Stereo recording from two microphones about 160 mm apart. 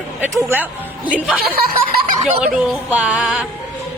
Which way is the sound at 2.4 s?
5° right (ahead or behind).